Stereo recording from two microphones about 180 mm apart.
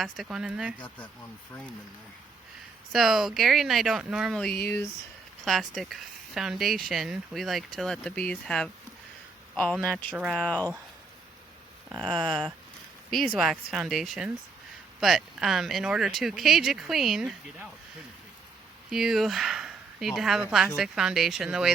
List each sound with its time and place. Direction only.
0.0 s speech: centre (ahead or behind)
0.8 s speech: 5° left (ahead or behind)
2.9 s speech: centre (ahead or behind)
12.0 s speech: 5° left (ahead or behind)
18.9 s speech: centre (ahead or behind)